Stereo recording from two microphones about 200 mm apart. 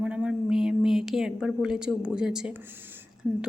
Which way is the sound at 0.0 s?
5° right (ahead or behind).